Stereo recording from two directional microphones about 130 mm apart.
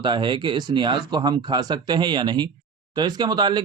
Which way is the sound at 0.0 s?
35° right (ahead or behind).